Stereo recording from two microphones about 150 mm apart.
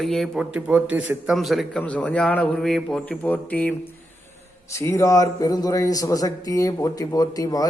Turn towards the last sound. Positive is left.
turn(degrees=25)  # may be behind; listen again after turning